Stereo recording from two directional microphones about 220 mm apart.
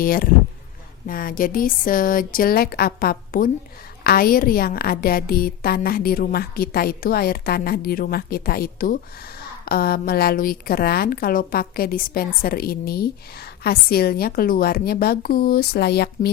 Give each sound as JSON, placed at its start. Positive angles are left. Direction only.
{"t": 0.0, "sound": "a woman's voice", "side_deg": 40}